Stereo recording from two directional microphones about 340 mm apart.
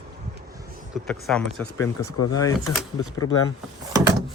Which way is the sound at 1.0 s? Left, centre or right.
Centre.